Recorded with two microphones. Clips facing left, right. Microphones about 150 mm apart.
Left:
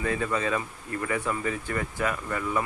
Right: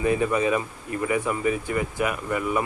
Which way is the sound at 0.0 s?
15° right (ahead or behind).